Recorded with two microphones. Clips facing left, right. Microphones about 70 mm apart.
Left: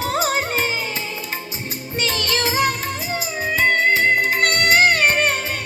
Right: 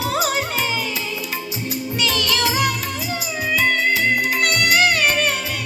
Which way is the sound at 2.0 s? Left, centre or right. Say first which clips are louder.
Even; left.